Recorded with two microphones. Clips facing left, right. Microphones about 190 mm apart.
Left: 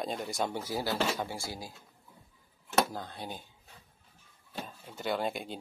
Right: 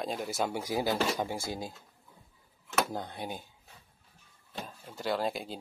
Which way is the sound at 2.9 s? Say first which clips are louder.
Right 3 dB; 15° right (ahead or behind).